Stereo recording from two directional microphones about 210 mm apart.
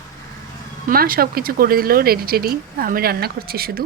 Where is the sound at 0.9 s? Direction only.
45° right (ahead or behind).